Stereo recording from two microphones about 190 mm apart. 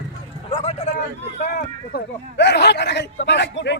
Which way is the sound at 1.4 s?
50° left (ahead or behind).